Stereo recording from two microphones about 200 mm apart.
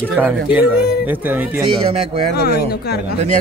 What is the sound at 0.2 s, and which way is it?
Speech, 10° right (ahead or behind).